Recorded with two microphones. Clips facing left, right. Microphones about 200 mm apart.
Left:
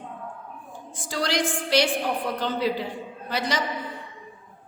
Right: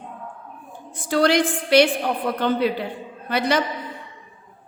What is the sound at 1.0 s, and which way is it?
A woman's voice, 60° right (ahead or behind).